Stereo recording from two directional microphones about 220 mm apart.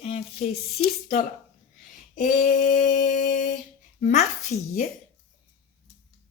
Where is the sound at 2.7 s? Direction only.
35° left (ahead or behind).